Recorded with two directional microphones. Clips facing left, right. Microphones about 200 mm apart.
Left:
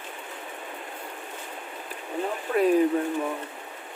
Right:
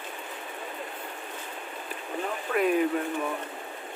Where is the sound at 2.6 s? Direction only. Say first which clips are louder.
Left 4 dB; 35° left (ahead or behind).